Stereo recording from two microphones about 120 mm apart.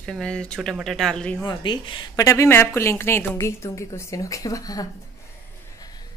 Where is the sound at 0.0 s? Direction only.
5° left (ahead or behind).